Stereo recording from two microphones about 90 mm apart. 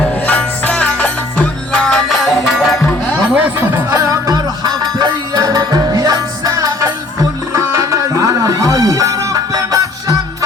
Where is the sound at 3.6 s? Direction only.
20° right (ahead or behind).